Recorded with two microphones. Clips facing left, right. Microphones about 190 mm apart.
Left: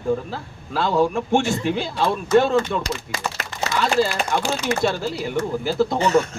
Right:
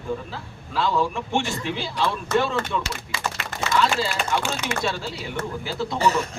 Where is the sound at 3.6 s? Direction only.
50° left (ahead or behind).